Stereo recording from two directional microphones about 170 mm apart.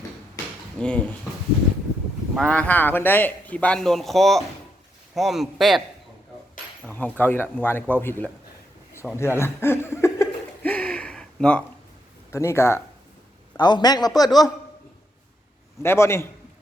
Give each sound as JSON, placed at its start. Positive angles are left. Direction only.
{"t": 0.8, "sound": "a man's voice", "side_deg": 5}
{"t": 2.3, "sound": "a man's voice", "side_deg": 5}
{"t": 6.8, "sound": "a man's voice", "side_deg": 10}
{"t": 9.1, "sound": "chuckle", "side_deg": 15}
{"t": 12.3, "sound": "a man's voice", "side_deg": 15}
{"t": 15.8, "sound": "a man's voice", "side_deg": 15}